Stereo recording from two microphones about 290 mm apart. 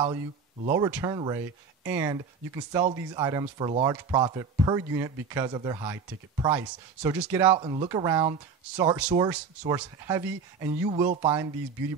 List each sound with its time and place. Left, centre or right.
0.7 s speech: centre